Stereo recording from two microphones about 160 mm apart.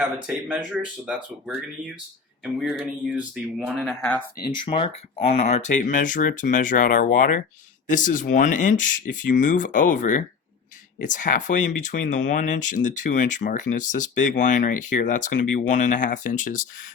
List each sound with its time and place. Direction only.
0.0 s speech: 10° right (ahead or behind)
4.6 s speech: 35° left (ahead or behind); by 16.9 s 55° left (ahead or behind)